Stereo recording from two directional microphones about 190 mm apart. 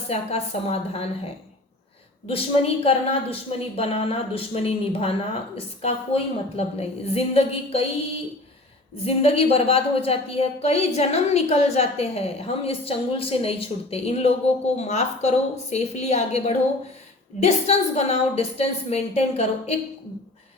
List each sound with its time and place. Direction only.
0.1 s a woman's voice: 30° left (ahead or behind)
2.2 s a woman's voice: 30° left (ahead or behind)
9.0 s a woman's voice: 30° left (ahead or behind)